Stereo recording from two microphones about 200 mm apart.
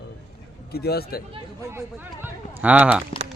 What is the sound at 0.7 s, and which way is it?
Speech, 50° left (ahead or behind).